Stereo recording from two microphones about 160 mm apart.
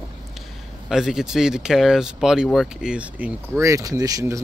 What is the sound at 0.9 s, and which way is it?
Speech, 5° right (ahead or behind).